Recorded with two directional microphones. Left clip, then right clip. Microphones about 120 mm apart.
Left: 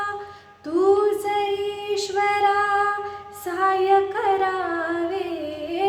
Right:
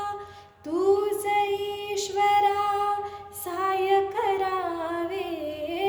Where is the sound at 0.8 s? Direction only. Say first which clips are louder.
Left 5 dB; 20° left (ahead or behind).